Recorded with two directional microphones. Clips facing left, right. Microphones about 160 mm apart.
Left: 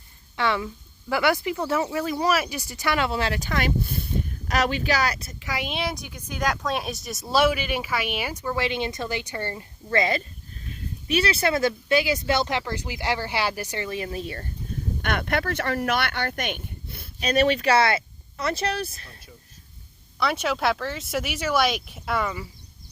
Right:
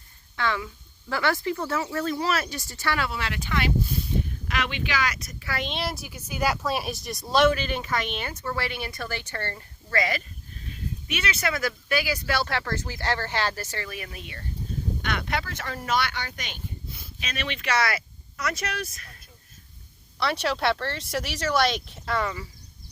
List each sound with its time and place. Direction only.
0.3 s a woman's voice: 15° left (ahead or behind); by 3.7 s 40° left (ahead or behind)
3.8 s a sound: 55° left (ahead or behind)
4.4 s speech: 40° left (ahead or behind)
5.4 s a woman's voice: 15° left (ahead or behind)
9.9 s speech: 25° left (ahead or behind)
15.0 s speech: 55° left (ahead or behind)
17.2 s speech: 40° left (ahead or behind)
20.1 s speech: centre (ahead or behind)